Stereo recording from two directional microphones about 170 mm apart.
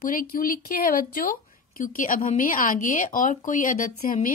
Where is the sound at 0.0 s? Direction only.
55° left (ahead or behind).